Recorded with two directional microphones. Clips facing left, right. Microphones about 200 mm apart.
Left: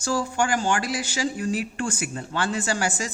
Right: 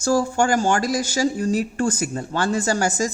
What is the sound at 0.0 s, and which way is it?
A woman's voice, 45° right (ahead or behind).